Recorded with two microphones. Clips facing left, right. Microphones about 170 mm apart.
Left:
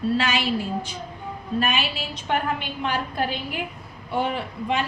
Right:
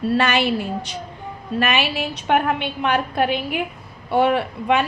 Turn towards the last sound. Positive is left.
turn(degrees=-65)  # may be behind; listen again after turning